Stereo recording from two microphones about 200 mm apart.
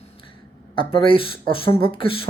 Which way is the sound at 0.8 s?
25° left (ahead or behind).